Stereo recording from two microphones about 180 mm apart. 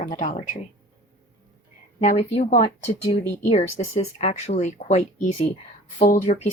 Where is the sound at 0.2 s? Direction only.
40° left (ahead or behind).